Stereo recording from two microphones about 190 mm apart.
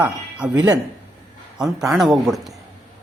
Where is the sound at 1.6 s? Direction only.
Centre (ahead or behind).